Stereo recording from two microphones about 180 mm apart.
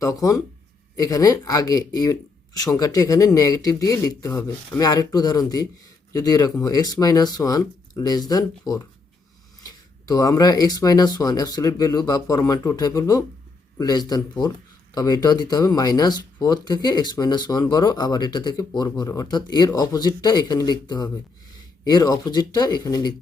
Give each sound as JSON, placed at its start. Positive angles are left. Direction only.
{"t": 0.0, "sound": "speech", "side_deg": 20}